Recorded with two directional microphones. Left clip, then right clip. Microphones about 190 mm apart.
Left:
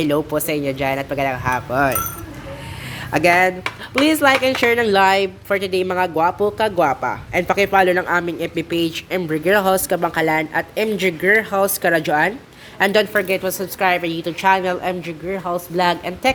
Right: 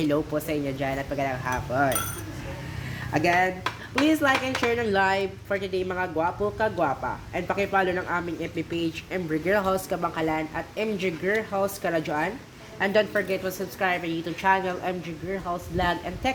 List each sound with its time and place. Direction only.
0.0 s a woman's voice: 35° left (ahead or behind)
3.1 s a woman's voice: 40° left (ahead or behind)